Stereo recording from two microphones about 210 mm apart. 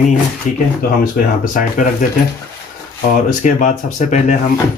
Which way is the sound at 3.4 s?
35° left (ahead or behind).